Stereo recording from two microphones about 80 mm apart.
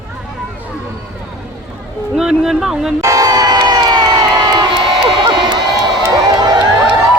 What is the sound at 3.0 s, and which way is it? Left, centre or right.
Vehicle, right.